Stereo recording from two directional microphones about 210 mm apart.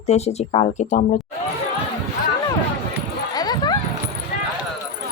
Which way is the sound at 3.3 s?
20° left (ahead or behind).